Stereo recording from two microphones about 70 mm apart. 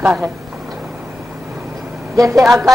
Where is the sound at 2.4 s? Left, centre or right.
Centre.